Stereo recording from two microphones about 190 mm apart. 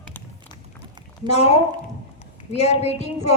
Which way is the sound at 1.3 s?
35° left (ahead or behind).